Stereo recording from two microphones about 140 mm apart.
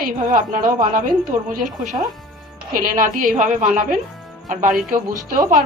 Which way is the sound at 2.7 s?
75° right (ahead or behind).